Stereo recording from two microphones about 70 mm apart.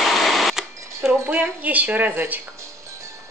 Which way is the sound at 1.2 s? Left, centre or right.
Right.